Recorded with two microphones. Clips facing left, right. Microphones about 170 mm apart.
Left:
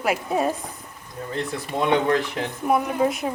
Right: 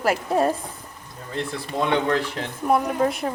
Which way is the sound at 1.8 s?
20° left (ahead or behind).